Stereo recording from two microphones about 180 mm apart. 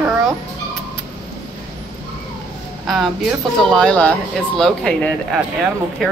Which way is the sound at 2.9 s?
Centre (ahead or behind).